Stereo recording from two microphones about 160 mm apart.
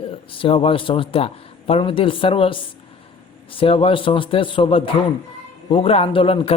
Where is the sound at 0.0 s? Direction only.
35° left (ahead or behind).